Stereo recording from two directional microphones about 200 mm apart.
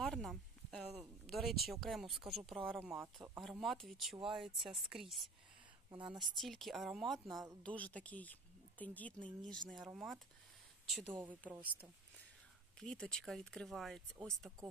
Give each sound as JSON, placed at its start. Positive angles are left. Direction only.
{"t": 0.0, "sound": "speech", "side_deg": 5}
{"t": 5.9, "sound": "a woman's voice", "side_deg": -25}
{"t": 6.1, "sound": "speech", "side_deg": 0}
{"t": 12.7, "sound": "speech", "side_deg": 5}